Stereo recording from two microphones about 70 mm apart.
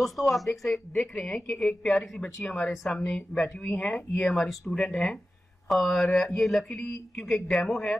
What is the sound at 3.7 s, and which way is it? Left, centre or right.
A man's voice, centre.